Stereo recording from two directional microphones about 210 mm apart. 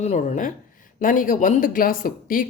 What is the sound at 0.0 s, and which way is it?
Speech, 35° left (ahead or behind).